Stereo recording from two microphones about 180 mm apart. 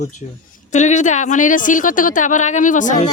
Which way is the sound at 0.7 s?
40° left (ahead or behind).